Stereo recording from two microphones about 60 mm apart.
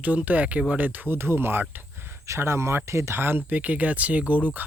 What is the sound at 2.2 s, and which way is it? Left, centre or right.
Speech, right.